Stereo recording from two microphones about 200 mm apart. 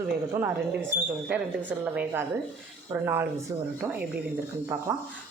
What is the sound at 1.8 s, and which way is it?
Speech, 5° right (ahead or behind).